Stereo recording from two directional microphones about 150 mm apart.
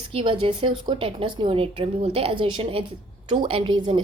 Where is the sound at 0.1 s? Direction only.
35° right (ahead or behind).